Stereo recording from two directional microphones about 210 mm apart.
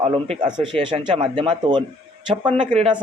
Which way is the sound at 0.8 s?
20° right (ahead or behind).